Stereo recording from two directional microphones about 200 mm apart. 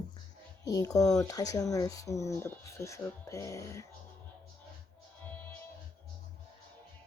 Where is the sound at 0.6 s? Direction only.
15° left (ahead or behind).